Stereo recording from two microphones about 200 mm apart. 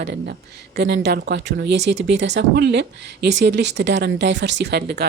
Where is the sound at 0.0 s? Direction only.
55° right (ahead or behind).